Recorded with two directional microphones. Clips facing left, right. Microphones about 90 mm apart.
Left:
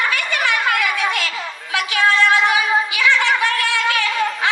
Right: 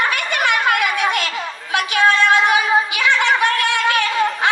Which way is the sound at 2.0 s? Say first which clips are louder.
Right 1 dB; 55° right (ahead or behind).